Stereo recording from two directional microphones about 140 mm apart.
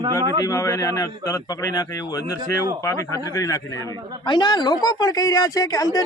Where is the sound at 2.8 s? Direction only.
20° left (ahead or behind).